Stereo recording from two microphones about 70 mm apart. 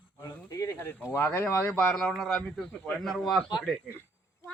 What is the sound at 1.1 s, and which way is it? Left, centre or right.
Speech, left.